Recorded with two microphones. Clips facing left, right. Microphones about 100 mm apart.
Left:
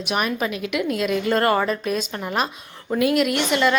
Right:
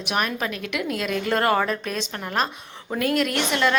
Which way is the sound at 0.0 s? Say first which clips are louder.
Left 2 dB; centre (ahead or behind).